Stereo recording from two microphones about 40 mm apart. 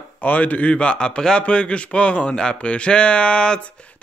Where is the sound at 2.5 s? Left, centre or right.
Left.